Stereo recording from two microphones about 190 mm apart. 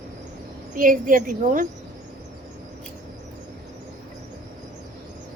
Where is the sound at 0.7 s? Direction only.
45° right (ahead or behind).